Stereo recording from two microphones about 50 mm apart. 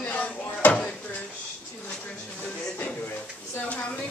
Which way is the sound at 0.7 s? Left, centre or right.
Centre.